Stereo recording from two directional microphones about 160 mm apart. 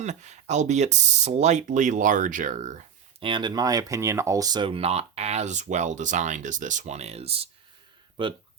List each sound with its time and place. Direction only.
0.0 s speech: 45° right (ahead or behind)
3.2 s speech: 30° right (ahead or behind)